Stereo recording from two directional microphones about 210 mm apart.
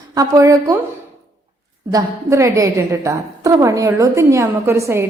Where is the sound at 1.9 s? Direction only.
15° right (ahead or behind).